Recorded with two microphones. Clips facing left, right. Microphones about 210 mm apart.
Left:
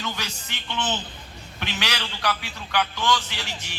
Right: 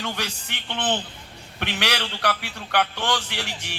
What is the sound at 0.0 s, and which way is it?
A man's voice, 65° right (ahead or behind).